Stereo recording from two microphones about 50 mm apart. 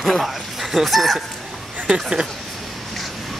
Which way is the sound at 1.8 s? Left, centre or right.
Centre.